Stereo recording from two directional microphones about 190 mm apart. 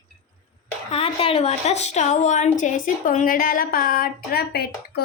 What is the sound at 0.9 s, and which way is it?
A woman's voice, 30° left (ahead or behind).